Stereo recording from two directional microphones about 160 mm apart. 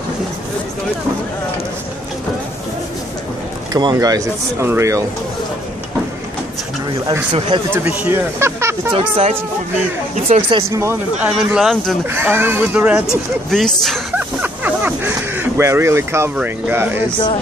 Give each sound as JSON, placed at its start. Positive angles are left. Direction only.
{"t": 3.7, "sound": "speech", "side_deg": -25}
{"t": 7.3, "sound": "speech", "side_deg": -35}
{"t": 7.7, "sound": "speech", "side_deg": -15}
{"t": 8.9, "sound": "speech", "side_deg": -35}
{"t": 10.1, "sound": "speech", "side_deg": -50}
{"t": 10.7, "sound": "speech", "side_deg": -15}
{"t": 11.2, "sound": "speech", "side_deg": 0}
{"t": 12.1, "sound": "speech", "side_deg": -15}
{"t": 13.5, "sound": "speech", "side_deg": 5}
{"t": 14.4, "sound": "a sound", "side_deg": -10}